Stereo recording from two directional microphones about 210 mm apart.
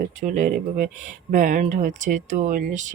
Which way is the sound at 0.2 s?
40° right (ahead or behind).